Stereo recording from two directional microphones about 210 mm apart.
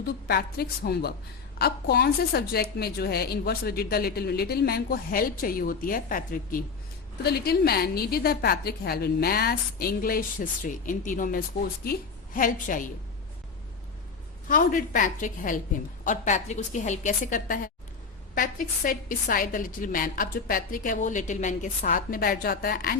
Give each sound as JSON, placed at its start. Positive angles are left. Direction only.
{"t": 0.0, "sound": "a woman's voice", "side_deg": 50}
{"t": 14.4, "sound": "a woman's voice", "side_deg": 40}